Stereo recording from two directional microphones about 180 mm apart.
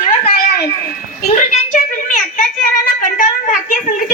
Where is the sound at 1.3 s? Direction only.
45° left (ahead or behind).